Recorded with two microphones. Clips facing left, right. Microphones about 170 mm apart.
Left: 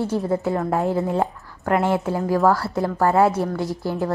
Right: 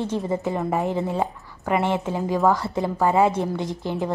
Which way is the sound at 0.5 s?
5° right (ahead or behind).